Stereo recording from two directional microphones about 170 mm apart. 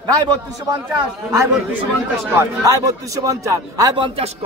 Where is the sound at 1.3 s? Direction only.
15° right (ahead or behind).